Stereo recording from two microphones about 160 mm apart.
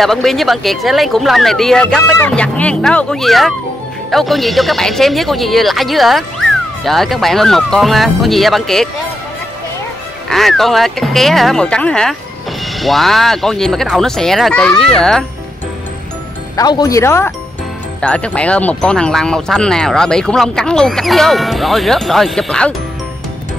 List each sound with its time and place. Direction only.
0.0 s speech: centre (ahead or behind)
10.3 s speech: centre (ahead or behind)
16.5 s speech: 25° left (ahead or behind); by 22.8 s 5° left (ahead or behind)